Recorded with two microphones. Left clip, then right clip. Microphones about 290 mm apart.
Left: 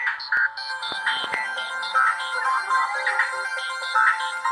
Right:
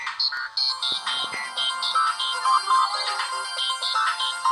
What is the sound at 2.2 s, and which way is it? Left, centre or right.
Music, centre.